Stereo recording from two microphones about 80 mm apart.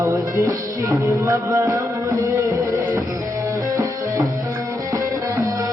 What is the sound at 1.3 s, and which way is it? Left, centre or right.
Music, right.